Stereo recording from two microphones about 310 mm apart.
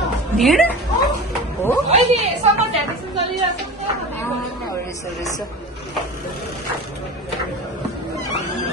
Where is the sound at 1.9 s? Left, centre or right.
Right.